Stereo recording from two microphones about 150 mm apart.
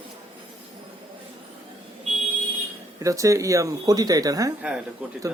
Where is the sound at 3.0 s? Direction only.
20° right (ahead or behind).